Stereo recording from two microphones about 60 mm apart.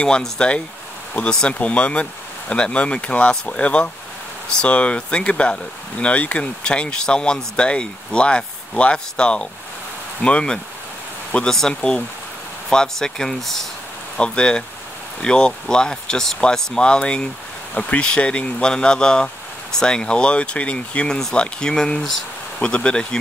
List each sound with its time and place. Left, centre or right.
0.0 s speech: centre
14.1 s speech: centre